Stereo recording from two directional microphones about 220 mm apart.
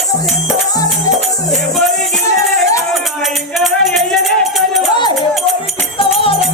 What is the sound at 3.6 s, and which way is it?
Music, centre (ahead or behind).